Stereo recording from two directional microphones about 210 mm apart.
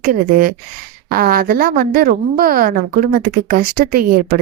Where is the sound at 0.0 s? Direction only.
40° right (ahead or behind).